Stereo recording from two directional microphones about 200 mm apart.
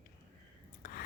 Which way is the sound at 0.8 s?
45° left (ahead or behind).